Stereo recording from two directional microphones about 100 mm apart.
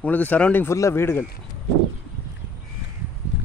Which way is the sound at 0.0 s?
15° left (ahead or behind).